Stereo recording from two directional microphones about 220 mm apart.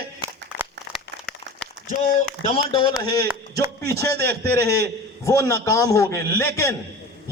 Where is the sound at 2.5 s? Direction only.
25° left (ahead or behind).